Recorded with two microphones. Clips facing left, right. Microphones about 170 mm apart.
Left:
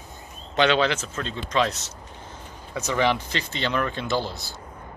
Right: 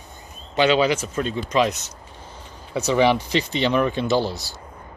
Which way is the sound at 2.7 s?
20° right (ahead or behind).